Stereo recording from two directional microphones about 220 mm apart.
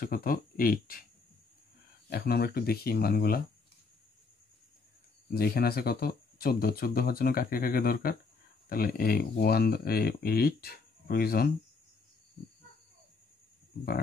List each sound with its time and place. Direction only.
0.0 s speech: 40° left (ahead or behind)
2.0 s speech: 45° left (ahead or behind)
5.3 s speech: 45° left (ahead or behind)